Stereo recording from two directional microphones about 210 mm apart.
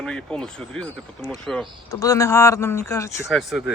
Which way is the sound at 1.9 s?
15° left (ahead or behind).